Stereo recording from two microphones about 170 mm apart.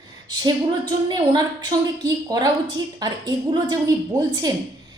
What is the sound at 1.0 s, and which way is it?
A woman's voice, 25° right (ahead or behind).